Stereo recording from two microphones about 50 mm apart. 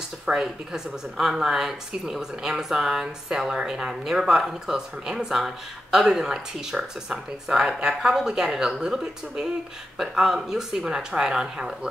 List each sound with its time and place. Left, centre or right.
0.3 s speech: right
1.1 s speech: centre